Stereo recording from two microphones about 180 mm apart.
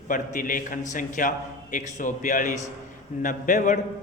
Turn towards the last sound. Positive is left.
turn(degrees=45)  # may be behind; listen again after turning